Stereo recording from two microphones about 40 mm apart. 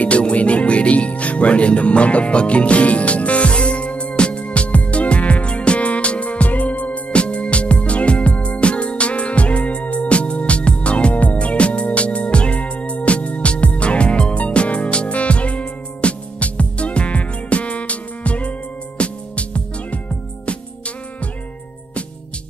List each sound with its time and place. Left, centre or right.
0.0 s music: left